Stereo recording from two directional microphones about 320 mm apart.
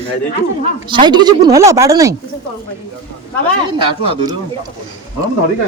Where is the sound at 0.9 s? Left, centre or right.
Centre.